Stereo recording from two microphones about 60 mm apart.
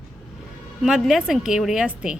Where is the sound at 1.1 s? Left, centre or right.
Centre.